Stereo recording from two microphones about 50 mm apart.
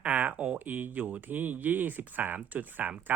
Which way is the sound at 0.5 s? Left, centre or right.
Right.